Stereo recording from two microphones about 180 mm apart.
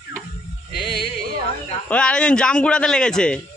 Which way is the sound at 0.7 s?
30° left (ahead or behind).